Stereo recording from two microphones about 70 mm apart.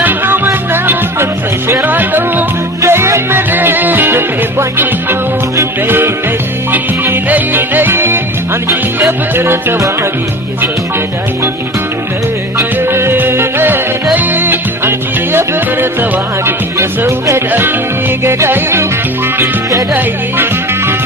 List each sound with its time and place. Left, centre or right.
0.0 s music: right
2.8 s music: right
6.7 s music: right
9.7 s music: right
12.5 s music: right
19.9 s music: right